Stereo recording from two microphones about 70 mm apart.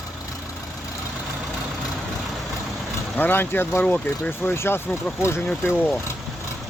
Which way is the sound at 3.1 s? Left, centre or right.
Left.